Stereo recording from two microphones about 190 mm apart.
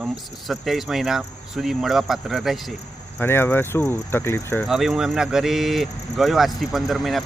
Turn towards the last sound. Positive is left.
turn(degrees=0)  # may be behind; listen again after turning